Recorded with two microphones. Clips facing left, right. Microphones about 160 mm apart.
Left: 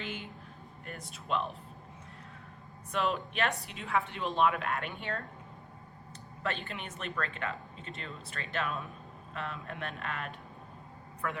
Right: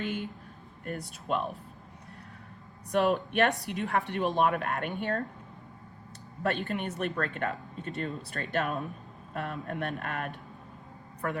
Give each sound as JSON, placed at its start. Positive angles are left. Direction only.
{"t": 0.0, "sound": "speech", "side_deg": -45}
{"t": 3.1, "sound": "speech", "side_deg": -45}
{"t": 3.5, "sound": "a woman's voice", "side_deg": -70}
{"t": 6.4, "sound": "speech", "side_deg": -45}